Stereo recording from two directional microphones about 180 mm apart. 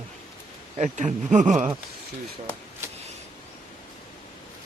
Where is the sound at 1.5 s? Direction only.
10° right (ahead or behind).